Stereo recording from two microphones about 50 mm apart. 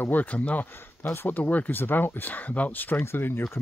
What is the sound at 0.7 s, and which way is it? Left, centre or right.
Speech, left.